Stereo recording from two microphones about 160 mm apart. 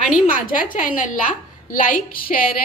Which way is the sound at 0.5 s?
55° left (ahead or behind).